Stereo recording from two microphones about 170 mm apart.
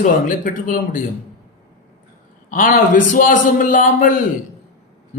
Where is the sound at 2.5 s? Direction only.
50° left (ahead or behind).